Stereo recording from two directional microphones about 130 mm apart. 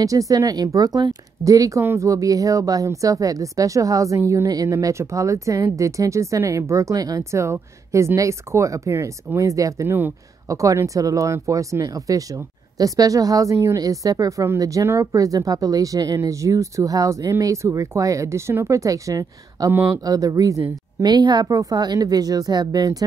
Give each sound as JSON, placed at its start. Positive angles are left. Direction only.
{"t": 0.0, "sound": "speech", "side_deg": -25}